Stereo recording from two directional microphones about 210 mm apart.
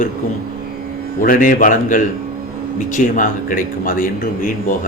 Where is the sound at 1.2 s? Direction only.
40° left (ahead or behind).